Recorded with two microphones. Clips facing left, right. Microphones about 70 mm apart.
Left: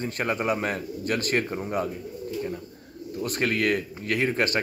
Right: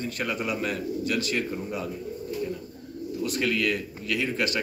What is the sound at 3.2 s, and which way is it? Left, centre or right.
A man's voice, left.